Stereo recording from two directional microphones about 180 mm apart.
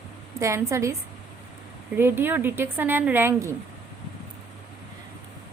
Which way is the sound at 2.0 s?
10° right (ahead or behind).